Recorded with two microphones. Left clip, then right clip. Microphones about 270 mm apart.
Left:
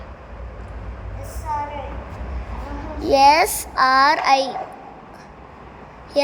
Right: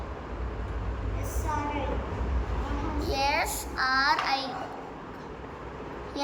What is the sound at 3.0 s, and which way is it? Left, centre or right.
A child's voice, centre.